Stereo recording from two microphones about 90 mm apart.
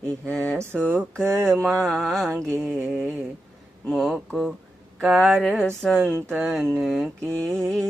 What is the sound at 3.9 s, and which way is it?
Music, 5° left (ahead or behind).